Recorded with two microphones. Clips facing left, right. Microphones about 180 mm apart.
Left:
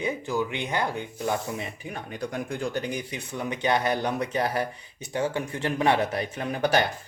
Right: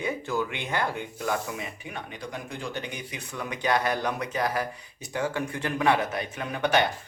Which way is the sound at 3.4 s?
25° left (ahead or behind).